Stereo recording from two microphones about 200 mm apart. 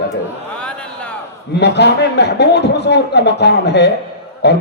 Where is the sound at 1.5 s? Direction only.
60° left (ahead or behind).